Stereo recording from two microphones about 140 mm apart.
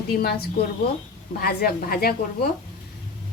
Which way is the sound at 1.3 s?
90° left.